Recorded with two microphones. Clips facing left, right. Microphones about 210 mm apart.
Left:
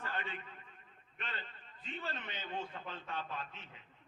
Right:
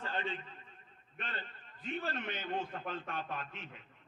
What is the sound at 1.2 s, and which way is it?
A man's voice, 55° right (ahead or behind).